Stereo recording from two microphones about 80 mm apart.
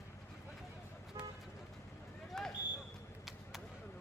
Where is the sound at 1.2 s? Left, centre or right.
Right.